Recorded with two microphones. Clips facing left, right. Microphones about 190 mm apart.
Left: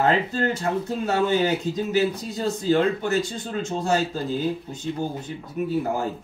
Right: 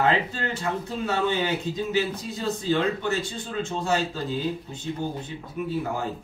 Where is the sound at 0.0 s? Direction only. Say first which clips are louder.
Left 3 dB; 40° left (ahead or behind).